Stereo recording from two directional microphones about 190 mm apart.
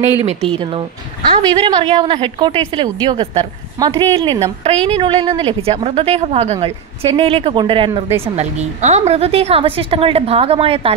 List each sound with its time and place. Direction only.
0.5 s a woman's voice: 25° right (ahead or behind)